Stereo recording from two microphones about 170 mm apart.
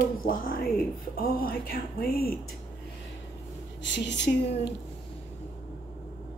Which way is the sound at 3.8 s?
90° left.